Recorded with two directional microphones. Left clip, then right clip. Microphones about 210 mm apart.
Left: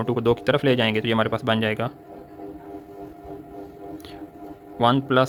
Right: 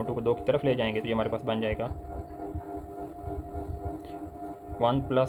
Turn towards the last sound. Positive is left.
turn(degrees=50)  # may be behind; listen again after turning